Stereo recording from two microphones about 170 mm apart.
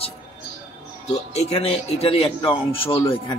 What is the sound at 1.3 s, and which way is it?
A man's voice, 35° left (ahead or behind).